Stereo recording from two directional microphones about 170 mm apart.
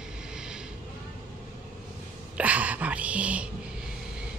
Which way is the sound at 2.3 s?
10° right (ahead or behind).